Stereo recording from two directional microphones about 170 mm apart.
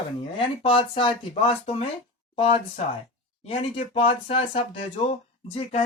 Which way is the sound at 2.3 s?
35° left (ahead or behind).